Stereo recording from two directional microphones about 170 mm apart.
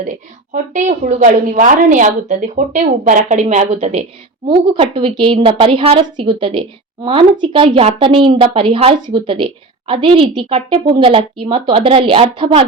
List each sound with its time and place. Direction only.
0.5 s a woman's voice: 45° right (ahead or behind)